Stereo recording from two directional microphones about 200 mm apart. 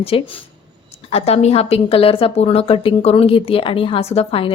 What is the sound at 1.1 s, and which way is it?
Speech, 30° left (ahead or behind).